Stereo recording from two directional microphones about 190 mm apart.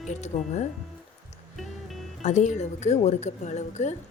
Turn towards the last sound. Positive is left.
turn(degrees=40)  # may be behind; listen again after turning